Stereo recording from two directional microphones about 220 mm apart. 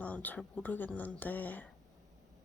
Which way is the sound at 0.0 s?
5° left (ahead or behind).